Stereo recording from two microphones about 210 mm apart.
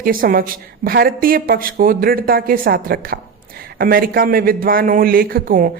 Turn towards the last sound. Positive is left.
turn(degrees=-40)  # may be behind; listen again after turning